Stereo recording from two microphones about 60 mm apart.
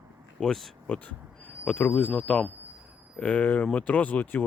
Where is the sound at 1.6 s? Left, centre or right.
Left.